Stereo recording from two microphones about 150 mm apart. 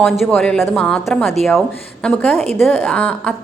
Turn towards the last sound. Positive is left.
turn(degrees=5)  # may be behind; listen again after turning